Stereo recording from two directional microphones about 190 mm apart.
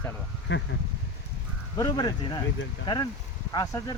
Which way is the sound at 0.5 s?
75° left (ahead or behind).